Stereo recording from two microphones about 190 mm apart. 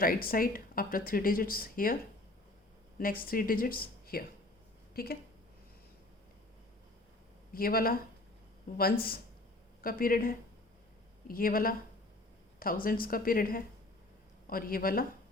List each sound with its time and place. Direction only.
0.0 s speech: 50° left (ahead or behind)
3.0 s speech: 50° left (ahead or behind)
7.5 s speech: 50° left (ahead or behind)
12.8 s speech: 50° left (ahead or behind)